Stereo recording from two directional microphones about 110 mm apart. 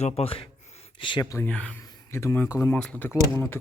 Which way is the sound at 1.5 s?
10° left (ahead or behind).